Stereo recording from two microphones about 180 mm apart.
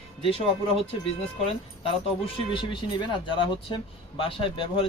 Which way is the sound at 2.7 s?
25° left (ahead or behind).